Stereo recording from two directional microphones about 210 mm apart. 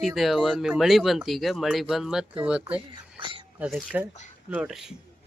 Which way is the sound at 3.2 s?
25° right (ahead or behind).